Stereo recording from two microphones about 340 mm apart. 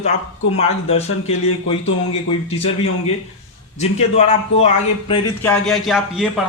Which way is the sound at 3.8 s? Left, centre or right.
Centre.